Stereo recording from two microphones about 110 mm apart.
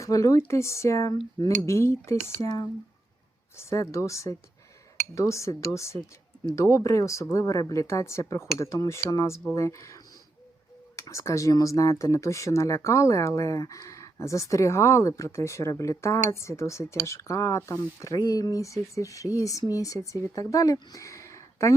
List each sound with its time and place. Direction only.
0.0 s speech: 30° left (ahead or behind)
3.6 s speech: 25° left (ahead or behind)